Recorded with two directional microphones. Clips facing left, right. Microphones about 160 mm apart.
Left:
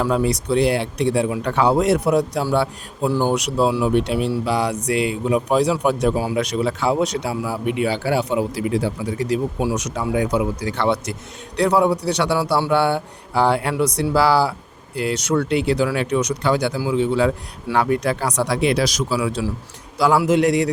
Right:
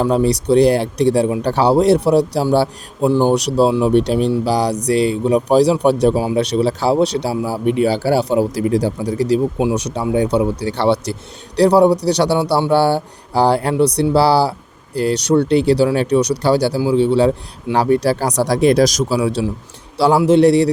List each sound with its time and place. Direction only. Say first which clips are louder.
0.0 s speech: right 4 dB; 35° right (ahead or behind)
3.1 s speech: right 5 dB; 20° right (ahead or behind)
3.3 s speech: right 5 dB; 35° right (ahead or behind)